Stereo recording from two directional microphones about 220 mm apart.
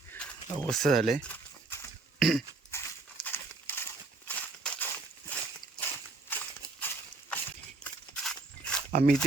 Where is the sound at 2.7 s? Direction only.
10° left (ahead or behind).